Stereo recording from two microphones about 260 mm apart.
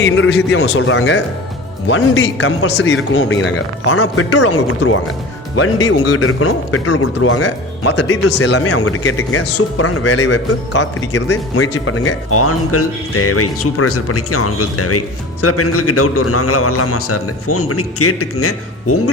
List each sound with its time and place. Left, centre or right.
0.0 s a man's voice: left
6.1 s speech: left